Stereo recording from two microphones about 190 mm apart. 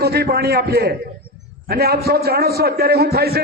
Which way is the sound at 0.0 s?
55° right (ahead or behind).